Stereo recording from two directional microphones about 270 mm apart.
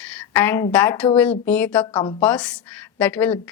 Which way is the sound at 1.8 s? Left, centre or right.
Centre.